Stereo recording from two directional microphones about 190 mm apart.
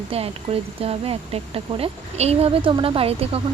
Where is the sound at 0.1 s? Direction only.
30° right (ahead or behind).